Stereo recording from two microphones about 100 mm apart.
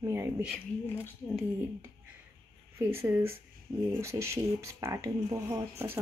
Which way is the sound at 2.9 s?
25° right (ahead or behind).